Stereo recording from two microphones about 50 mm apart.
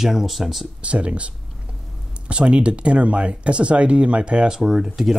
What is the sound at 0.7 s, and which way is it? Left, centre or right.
Speech, right.